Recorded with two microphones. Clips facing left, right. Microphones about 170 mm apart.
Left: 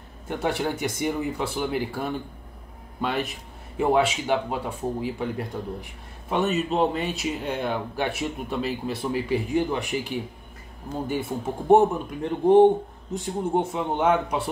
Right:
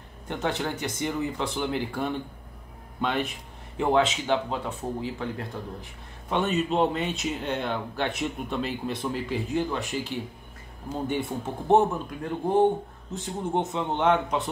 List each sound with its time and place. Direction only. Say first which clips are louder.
0.3 s speech: left 3 dB; 10° left (ahead or behind)